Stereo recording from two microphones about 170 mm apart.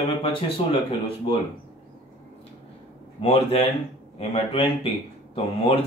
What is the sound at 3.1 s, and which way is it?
Speech, 35° left (ahead or behind).